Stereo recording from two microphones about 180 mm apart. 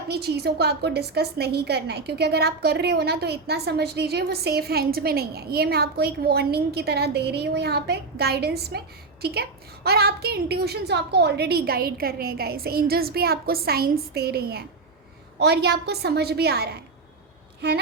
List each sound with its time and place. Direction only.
0.1 s a woman's voice: 65° right (ahead or behind)